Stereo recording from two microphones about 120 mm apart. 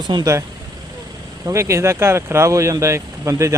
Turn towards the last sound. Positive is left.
turn(degrees=-25)  # may be behind; listen again after turning